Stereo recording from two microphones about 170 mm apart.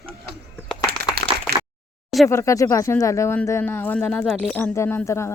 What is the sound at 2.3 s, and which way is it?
Speech, 15° left (ahead or behind).